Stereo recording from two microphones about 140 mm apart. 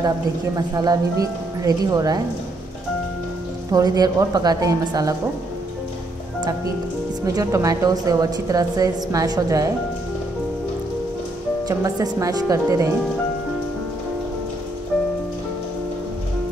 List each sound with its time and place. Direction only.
0.6 s a woman's voice: 25° right (ahead or behind)
3.7 s a woman's voice: 25° right (ahead or behind)
7.2 s a woman's voice: 25° right (ahead or behind)
11.6 s a woman's voice: 25° right (ahead or behind)